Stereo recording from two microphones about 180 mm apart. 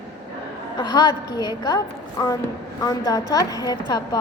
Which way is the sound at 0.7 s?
25° left (ahead or behind).